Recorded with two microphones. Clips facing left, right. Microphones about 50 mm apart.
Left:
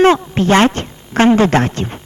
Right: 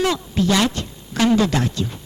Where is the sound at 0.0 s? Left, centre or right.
Left.